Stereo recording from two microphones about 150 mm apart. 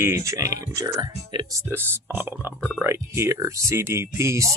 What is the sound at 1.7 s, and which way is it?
Speech, 15° right (ahead or behind).